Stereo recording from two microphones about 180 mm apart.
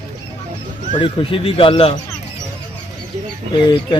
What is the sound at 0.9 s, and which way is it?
Speech, 30° left (ahead or behind).